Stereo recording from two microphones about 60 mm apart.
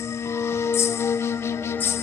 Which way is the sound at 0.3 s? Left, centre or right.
Left.